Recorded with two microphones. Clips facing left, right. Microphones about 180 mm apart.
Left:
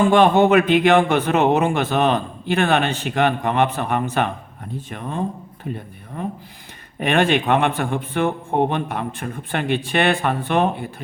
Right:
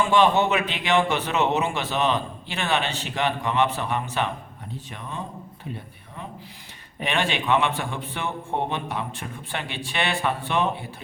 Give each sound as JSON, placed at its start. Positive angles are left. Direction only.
{"t": 0.0, "sound": "speech", "side_deg": 50}